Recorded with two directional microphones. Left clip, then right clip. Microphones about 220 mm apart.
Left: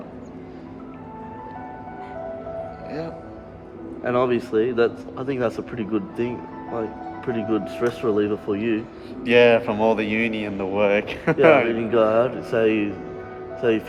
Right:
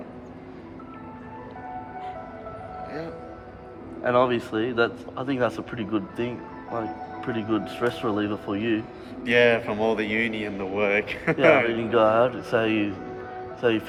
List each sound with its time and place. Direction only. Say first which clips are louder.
4.0 s speech: even; 5° right (ahead or behind)
9.2 s speech: left 4 dB; 20° left (ahead or behind)
11.7 s speech: left 1 dB; 5° right (ahead or behind)